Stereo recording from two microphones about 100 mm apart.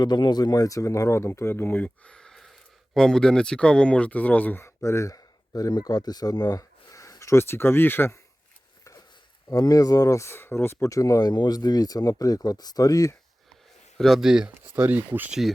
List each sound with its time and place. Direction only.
0.0 s speech: 45° left (ahead or behind); by 8.2 s 20° left (ahead or behind)
8.8 s a sound: 35° left (ahead or behind)
9.5 s speech: 40° left (ahead or behind)
14.0 s speech: 5° right (ahead or behind)
14.6 s speech: 20° right (ahead or behind)